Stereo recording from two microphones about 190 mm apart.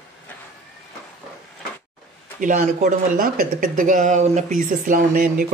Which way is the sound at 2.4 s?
45° right (ahead or behind).